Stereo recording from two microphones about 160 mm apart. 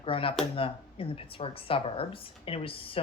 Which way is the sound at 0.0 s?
35° left (ahead or behind).